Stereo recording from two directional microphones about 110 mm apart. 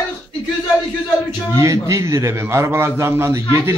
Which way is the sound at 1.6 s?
30° right (ahead or behind).